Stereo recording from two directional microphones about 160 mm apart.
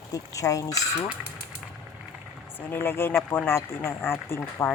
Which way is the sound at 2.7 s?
15° left (ahead or behind).